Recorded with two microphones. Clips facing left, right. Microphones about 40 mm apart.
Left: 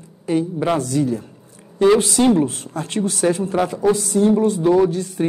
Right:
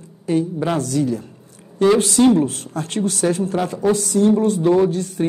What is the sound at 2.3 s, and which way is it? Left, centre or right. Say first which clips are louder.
Speech: right 1 dB; left.